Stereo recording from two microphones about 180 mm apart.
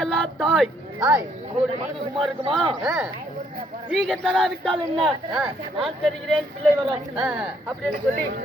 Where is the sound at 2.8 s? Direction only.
5° right (ahead or behind).